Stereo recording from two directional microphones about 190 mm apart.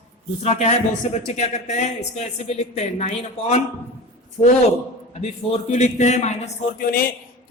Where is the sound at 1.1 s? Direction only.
35° left (ahead or behind).